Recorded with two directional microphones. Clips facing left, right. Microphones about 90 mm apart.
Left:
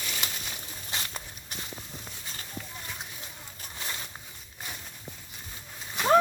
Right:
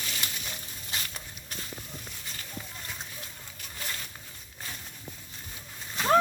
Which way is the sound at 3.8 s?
20° left (ahead or behind).